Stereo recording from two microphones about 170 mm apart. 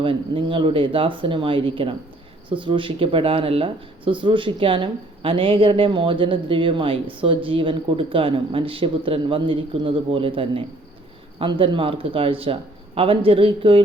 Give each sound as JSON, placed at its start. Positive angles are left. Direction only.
{"t": 0.0, "sound": "speech", "side_deg": -30}